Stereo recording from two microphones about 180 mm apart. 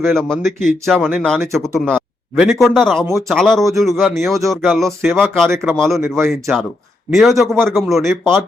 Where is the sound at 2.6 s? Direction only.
Centre (ahead or behind).